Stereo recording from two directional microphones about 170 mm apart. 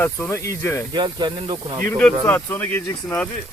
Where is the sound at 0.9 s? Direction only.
25° right (ahead or behind).